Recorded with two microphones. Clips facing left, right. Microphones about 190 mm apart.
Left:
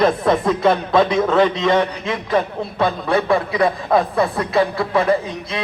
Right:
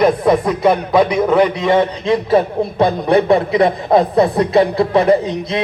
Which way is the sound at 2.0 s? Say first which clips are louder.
Right 6 dB; 30° right (ahead or behind).